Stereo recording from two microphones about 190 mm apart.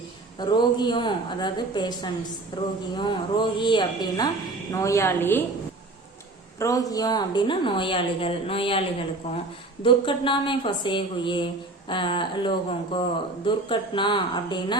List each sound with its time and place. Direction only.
0.3 s a woman's voice: 20° left (ahead or behind)
6.6 s speech: 15° left (ahead or behind); by 9.4 s 35° left (ahead or behind)
9.8 s speech: 25° left (ahead or behind)